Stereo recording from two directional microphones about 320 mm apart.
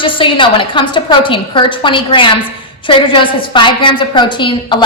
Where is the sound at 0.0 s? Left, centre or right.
Centre.